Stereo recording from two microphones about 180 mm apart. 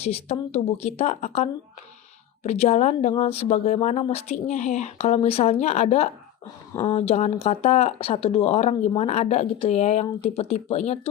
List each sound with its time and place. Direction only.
0.0 s speech: 35° left (ahead or behind)